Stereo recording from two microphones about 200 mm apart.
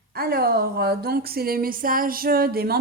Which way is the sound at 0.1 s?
50° right (ahead or behind).